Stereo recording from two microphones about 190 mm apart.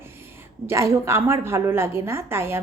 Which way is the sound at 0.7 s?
15° right (ahead or behind).